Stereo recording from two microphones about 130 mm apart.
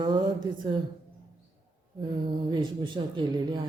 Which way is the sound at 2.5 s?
35° right (ahead or behind).